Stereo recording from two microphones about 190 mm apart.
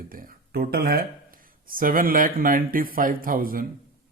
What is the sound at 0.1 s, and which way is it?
Speech, 50° right (ahead or behind).